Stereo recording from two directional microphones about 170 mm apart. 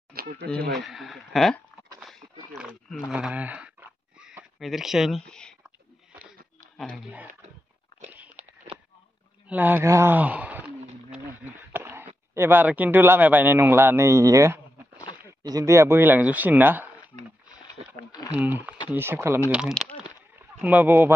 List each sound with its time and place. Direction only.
0.1 s speech: 60° right (ahead or behind)
0.8 s speech: centre (ahead or behind)
2.0 s a sound: centre (ahead or behind)
3.1 s speech: 5° right (ahead or behind)
4.2 s a sound: 5° right (ahead or behind)
9.5 s speech: 10° right (ahead or behind)
18.3 s speech: 10° right (ahead or behind)
19.5 s speech: 5° right (ahead or behind)